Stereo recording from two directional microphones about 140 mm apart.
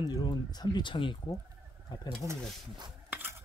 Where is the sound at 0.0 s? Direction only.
30° left (ahead or behind).